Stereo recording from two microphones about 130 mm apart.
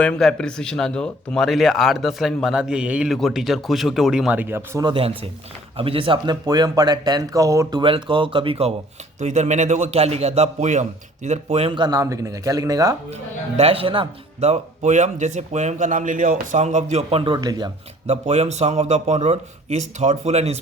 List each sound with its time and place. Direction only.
0.0 s speech: 5° left (ahead or behind); by 4.8 s 15° right (ahead or behind)
4.8 s speech: 40° right (ahead or behind); by 7.8 s 25° right (ahead or behind)
7.8 s speech: 40° right (ahead or behind)
9.2 s speech: 65° right (ahead or behind)
11.8 s speech: 30° right (ahead or behind)
13.6 s speech: 50° right (ahead or behind)
14.4 s speech: 60° right (ahead or behind)
17.3 s speech: 30° right (ahead or behind)
18.0 s speech: 55° right (ahead or behind)